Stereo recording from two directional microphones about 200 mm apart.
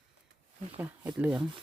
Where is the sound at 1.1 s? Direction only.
10° right (ahead or behind).